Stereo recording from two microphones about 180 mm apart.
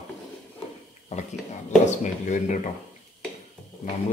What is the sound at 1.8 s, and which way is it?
Speech, 45° left (ahead or behind).